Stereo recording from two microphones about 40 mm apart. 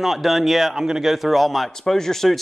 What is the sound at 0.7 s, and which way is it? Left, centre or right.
Speech, centre.